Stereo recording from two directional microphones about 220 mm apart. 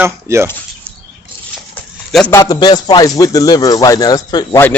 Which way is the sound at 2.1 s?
Centre (ahead or behind).